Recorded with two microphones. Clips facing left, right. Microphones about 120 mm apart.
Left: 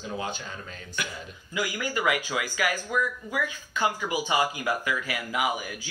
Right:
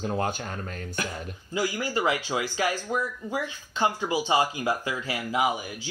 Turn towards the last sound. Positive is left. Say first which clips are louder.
# right 2 dB
turn(degrees=-25)  # may be behind; listen again after turning